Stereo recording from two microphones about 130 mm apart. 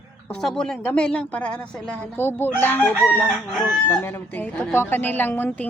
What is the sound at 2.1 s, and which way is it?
A woman's voice, 15° left (ahead or behind).